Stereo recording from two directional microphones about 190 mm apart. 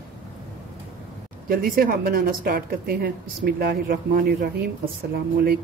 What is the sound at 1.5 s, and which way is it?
Speech, 50° right (ahead or behind).